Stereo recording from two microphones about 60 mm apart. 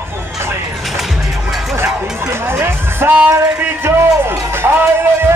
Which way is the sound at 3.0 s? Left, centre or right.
Centre.